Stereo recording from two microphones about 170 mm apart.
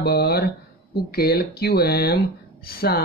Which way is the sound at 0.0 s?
70° left (ahead or behind).